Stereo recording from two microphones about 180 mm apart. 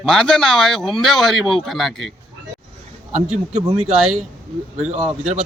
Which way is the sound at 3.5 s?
30° right (ahead or behind).